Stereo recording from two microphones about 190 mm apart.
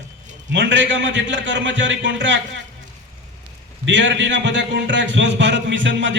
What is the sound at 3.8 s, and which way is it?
A man's voice, 70° right (ahead or behind).